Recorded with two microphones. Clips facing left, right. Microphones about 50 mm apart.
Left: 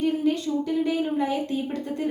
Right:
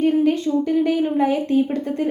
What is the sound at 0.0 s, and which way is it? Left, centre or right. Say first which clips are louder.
A woman's voice: right 6 dB; right.